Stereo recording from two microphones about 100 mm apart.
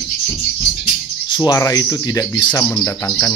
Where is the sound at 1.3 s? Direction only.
45° left (ahead or behind).